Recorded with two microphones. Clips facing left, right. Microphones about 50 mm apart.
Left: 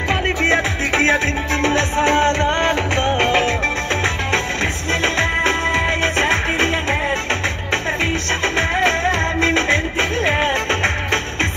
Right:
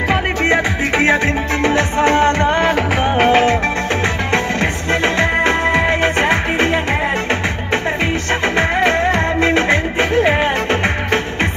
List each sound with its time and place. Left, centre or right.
0.1 s music: centre
5.0 s music: centre
8.5 s music: centre